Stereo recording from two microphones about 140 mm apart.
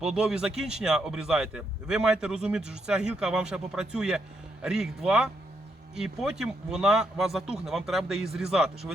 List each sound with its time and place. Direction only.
0.0 s speech: 5° right (ahead or behind)